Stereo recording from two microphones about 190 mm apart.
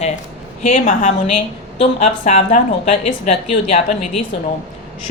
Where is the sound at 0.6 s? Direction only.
40° left (ahead or behind).